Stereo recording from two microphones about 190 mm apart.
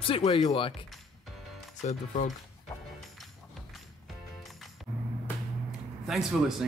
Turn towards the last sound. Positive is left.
turn(degrees=0)  # may be behind; listen again after turning